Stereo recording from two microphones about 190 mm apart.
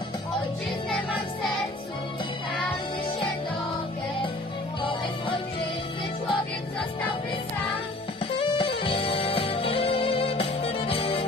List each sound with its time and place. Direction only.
8.4 s music: 25° left (ahead or behind)